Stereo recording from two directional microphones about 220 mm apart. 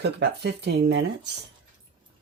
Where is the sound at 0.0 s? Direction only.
50° right (ahead or behind).